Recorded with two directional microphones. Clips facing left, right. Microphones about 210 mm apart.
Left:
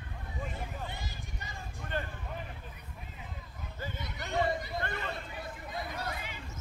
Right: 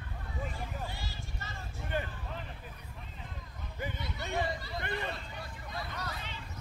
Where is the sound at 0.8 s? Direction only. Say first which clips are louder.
Even; 20° left (ahead or behind).